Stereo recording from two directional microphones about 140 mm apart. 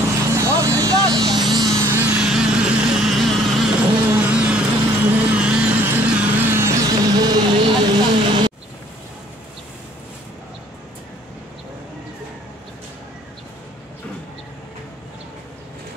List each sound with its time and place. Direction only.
0.0 s vehicle: 20° right (ahead or behind)